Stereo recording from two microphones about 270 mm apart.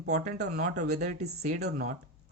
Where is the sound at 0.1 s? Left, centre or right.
Right.